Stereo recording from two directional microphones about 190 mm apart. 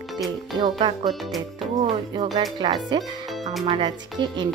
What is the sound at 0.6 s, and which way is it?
Speech, 25° right (ahead or behind).